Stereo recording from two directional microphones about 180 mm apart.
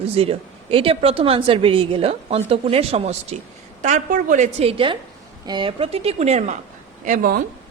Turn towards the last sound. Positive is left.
turn(degrees=-50)  # may be behind; listen again after turning